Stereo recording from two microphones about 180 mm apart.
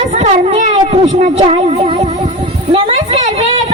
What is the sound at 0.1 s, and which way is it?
A woman's voice, 40° right (ahead or behind).